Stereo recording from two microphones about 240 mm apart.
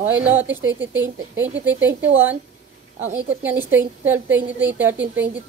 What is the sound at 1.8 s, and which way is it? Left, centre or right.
Speech, right.